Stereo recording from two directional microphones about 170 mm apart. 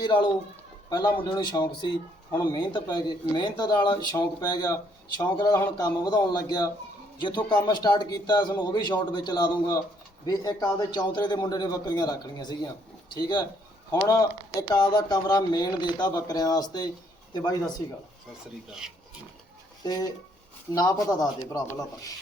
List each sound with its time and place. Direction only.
0.0 s speech: 25° left (ahead or behind)
19.8 s speech: 25° left (ahead or behind)